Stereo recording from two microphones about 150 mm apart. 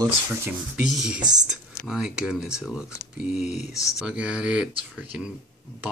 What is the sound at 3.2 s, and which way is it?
Speech, 50° left (ahead or behind).